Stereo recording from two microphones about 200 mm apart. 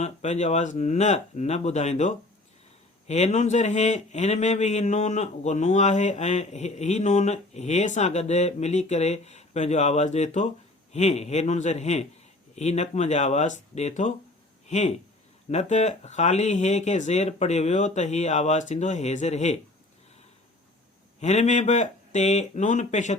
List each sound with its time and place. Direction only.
0.0 s a man's voice: 35° left (ahead or behind)
21.2 s a man's voice: 35° left (ahead or behind)